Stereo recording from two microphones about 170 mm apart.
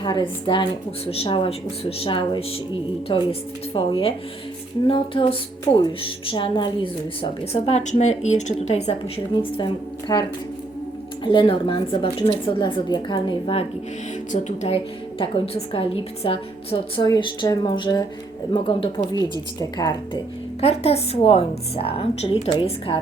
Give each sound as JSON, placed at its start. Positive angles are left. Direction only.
{"t": 0.0, "sound": "a woman's voice", "side_deg": 25}
{"t": 9.4, "sound": "a woman's voice", "side_deg": 30}
{"t": 14.3, "sound": "speech", "side_deg": 45}
{"t": 15.2, "sound": "a woman's voice", "side_deg": 35}
{"t": 20.6, "sound": "speech", "side_deg": 35}